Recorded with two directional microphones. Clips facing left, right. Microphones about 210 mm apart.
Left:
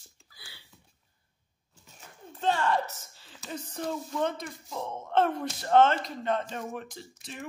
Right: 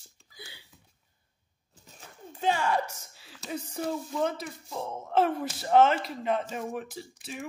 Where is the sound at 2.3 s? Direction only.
10° right (ahead or behind).